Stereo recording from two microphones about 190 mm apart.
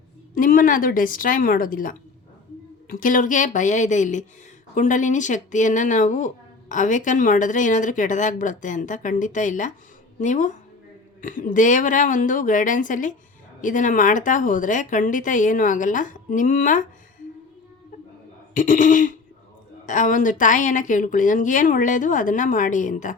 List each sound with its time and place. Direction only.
0.3 s a woman's voice: 45° left (ahead or behind)
18.5 s a woman's voice: 45° left (ahead or behind)